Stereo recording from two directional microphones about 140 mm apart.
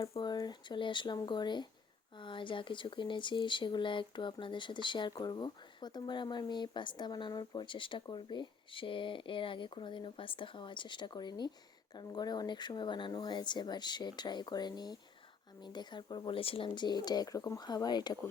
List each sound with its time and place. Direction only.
0.0 s speech: 40° left (ahead or behind)